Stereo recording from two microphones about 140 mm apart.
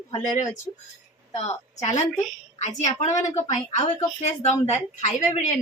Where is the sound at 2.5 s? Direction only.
55° left (ahead or behind).